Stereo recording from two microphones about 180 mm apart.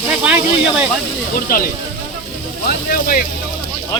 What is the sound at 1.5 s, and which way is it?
Speech, 50° left (ahead or behind).